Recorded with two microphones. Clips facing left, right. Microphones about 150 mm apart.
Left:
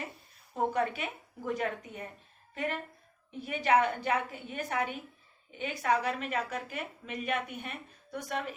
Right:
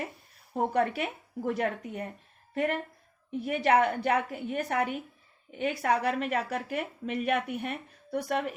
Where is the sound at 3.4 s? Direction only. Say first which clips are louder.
Right 2 dB; 60° right (ahead or behind).